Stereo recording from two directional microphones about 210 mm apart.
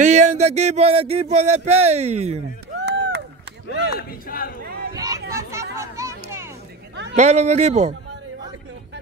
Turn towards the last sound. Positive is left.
turn(degrees=-30)  # may be behind; listen again after turning